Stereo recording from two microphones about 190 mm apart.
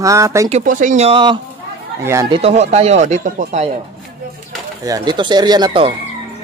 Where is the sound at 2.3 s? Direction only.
30° right (ahead or behind).